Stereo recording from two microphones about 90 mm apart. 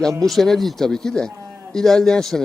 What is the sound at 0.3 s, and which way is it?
A man's voice, centre (ahead or behind).